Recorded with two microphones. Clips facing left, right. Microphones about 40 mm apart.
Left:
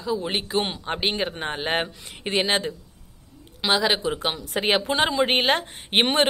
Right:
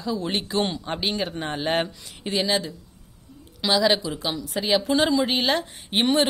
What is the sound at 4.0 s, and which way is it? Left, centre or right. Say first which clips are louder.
Speech: left 2 dB; left.